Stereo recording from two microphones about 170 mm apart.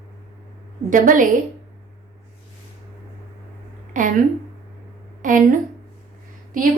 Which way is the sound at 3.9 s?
50° right (ahead or behind).